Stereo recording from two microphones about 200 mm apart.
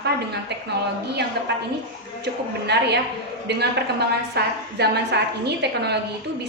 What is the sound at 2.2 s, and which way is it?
A woman's voice, 55° right (ahead or behind).